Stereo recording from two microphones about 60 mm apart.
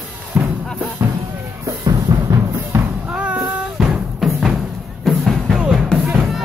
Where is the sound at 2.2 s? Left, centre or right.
Right.